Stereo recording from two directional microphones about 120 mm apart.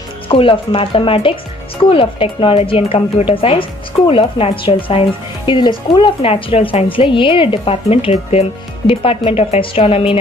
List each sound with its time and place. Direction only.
0.3 s a woman's voice: 50° left (ahead or behind)
8.1 s speech: 60° left (ahead or behind)